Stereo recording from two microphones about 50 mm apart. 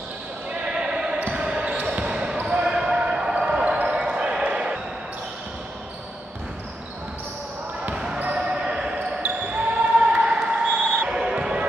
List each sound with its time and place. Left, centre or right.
0.7 s basketball bounce: centre
7.9 s basketball bounce: centre